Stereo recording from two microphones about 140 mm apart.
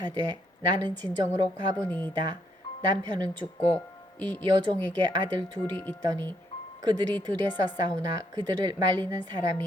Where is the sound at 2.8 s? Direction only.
30° right (ahead or behind).